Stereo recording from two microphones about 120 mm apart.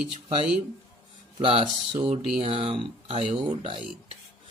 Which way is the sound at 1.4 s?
55° right (ahead or behind).